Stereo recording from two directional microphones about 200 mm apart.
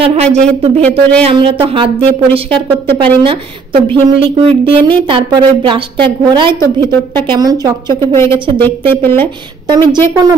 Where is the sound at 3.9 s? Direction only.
25° right (ahead or behind).